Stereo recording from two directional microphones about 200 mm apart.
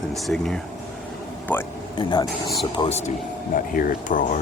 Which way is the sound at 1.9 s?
25° left (ahead or behind).